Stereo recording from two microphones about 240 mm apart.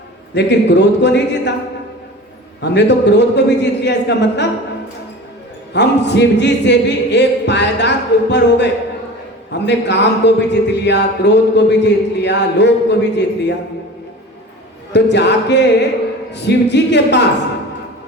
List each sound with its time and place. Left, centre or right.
0.3 s a man's voice: left
2.6 s a man's voice: left
5.7 s a man's voice: left
15.1 s a man's voice: left